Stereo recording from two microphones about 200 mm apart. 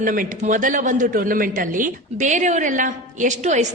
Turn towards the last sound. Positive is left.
turn(degrees=-35)  # may be behind; listen again after turning